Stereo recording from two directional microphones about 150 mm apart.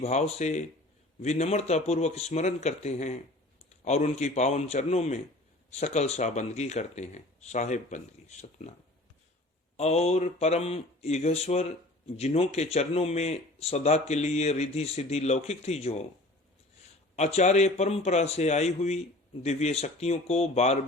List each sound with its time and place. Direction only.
0.0 s speech: 45° left (ahead or behind)
9.7 s speech: 45° left (ahead or behind)
17.2 s speech: 50° left (ahead or behind)